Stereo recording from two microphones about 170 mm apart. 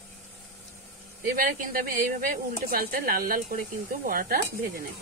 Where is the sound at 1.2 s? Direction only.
55° right (ahead or behind).